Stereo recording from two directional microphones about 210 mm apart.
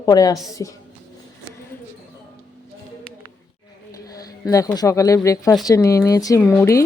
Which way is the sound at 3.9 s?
15° left (ahead or behind).